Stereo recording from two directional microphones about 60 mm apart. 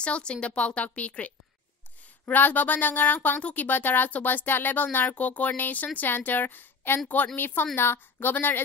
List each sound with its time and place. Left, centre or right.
0.0 s a woman's voice: centre; by 8.5 s left